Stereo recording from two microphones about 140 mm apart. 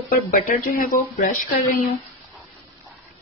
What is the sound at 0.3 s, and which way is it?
Speech, 85° left.